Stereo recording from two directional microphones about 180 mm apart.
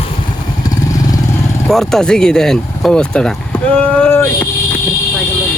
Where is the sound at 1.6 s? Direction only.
Centre (ahead or behind).